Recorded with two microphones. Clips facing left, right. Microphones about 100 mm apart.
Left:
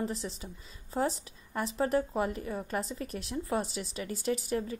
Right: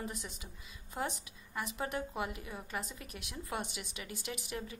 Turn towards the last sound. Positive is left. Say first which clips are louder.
# left 10 dB
turn(degrees=35)  # may be behind; listen again after turning